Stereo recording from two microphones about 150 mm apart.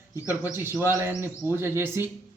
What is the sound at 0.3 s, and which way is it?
Speech, 15° right (ahead or behind).